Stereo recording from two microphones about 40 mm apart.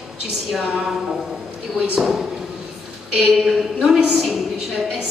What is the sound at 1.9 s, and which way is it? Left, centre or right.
Speech, centre.